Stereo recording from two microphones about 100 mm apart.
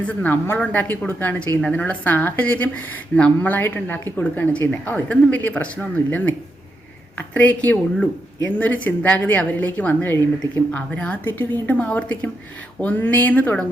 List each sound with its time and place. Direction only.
0.0 s a woman's voice: 15° left (ahead or behind)